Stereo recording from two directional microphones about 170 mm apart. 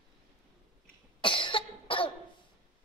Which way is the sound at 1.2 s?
30° left (ahead or behind).